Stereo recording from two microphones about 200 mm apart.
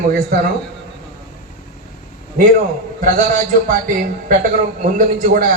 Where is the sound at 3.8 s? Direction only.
45° right (ahead or behind).